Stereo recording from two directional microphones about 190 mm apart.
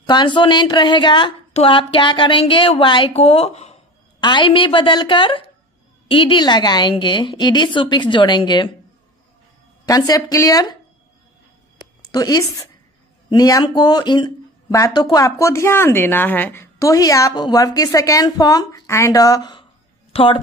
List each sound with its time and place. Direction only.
0.0 s a woman's voice: 25° left (ahead or behind)
9.8 s a woman's voice: 20° left (ahead or behind)
12.1 s a woman's voice: 20° left (ahead or behind)
20.1 s a sound: 30° left (ahead or behind)